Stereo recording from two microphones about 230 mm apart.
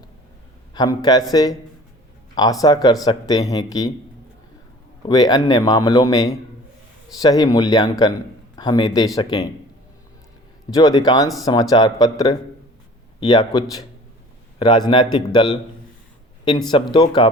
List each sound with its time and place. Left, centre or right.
0.7 s a man's voice: centre
5.0 s a man's voice: centre
10.8 s speech: centre
13.1 s speech: centre